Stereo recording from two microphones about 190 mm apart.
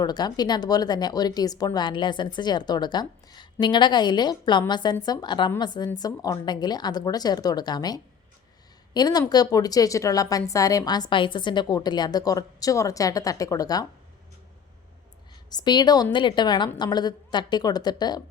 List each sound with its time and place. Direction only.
0.0 s a woman's voice: 20° left (ahead or behind)
15.4 s a woman's voice: 20° left (ahead or behind)